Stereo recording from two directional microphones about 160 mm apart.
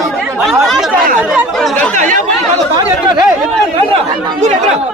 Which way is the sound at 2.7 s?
30° right (ahead or behind).